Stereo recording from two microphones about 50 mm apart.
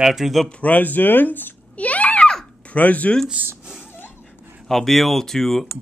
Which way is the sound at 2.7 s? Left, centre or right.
Left.